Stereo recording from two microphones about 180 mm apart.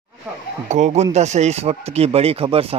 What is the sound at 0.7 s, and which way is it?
Speech, 40° right (ahead or behind).